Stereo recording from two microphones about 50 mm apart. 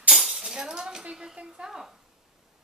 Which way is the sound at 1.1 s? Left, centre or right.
Centre.